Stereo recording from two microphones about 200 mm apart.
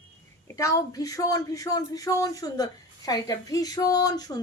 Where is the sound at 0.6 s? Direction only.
15° left (ahead or behind).